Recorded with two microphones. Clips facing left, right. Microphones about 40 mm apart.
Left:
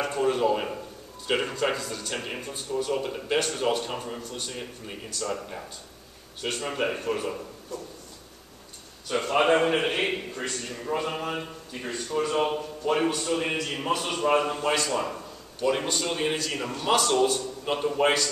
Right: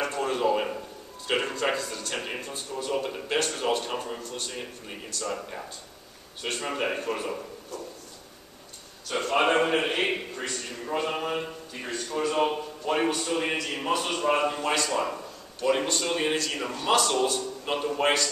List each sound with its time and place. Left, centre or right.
0.0 s a sound: centre
1.2 s a man's voice: centre
9.1 s a man's voice: centre
12.9 s a man's voice: centre